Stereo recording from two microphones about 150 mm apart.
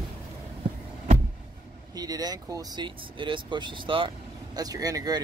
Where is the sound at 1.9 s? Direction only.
25° right (ahead or behind).